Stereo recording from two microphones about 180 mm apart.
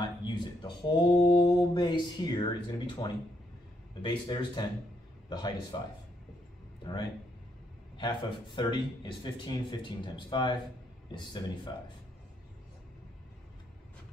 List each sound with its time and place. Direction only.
0.0 s mantra: 25° left (ahead or behind)
3.0 s speech: 20° left (ahead or behind)
6.8 s speech: 25° left (ahead or behind)